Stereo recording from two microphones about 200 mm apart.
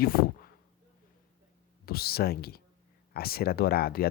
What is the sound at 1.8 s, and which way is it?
Speech, 50° left (ahead or behind).